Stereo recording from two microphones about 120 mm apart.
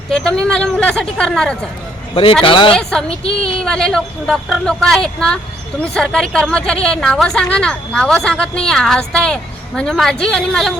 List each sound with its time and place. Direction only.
0.1 s speech: 5° left (ahead or behind)
2.4 s a woman's voice: 45° left (ahead or behind)
3.6 s a woman's voice: 5° left (ahead or behind)